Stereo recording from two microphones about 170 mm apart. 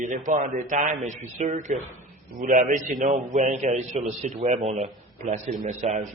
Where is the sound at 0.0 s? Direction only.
45° right (ahead or behind).